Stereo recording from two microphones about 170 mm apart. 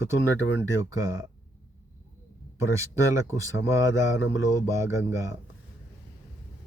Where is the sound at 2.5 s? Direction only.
15° right (ahead or behind).